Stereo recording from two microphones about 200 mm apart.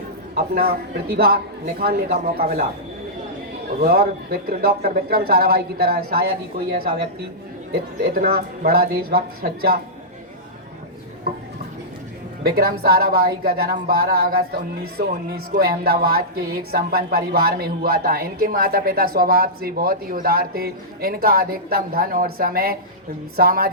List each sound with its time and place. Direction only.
0.3 s a woman's voice: 50° right (ahead or behind)
3.8 s a woman's voice: 50° right (ahead or behind)
7.7 s a woman's voice: 50° right (ahead or behind)
11.3 s a woman's voice: 50° right (ahead or behind)
12.5 s a woman's voice: 50° right (ahead or behind)